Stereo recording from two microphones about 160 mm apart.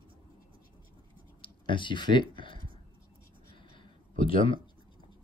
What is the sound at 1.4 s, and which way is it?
Speech, 30° left (ahead or behind).